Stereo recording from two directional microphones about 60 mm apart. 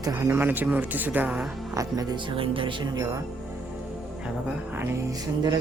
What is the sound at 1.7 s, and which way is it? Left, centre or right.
Speech, right.